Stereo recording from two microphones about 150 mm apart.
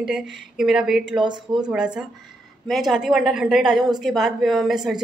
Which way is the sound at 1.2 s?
30° right (ahead or behind).